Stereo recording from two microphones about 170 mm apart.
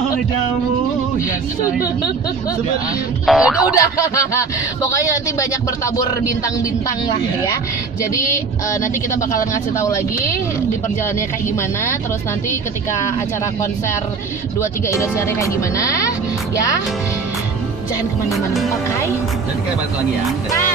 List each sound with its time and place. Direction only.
3.3 s music: 5° right (ahead or behind)
3.7 s speech: 20° left (ahead or behind)
8.1 s speech: 20° left (ahead or behind)
14.9 s speech: 15° left (ahead or behind)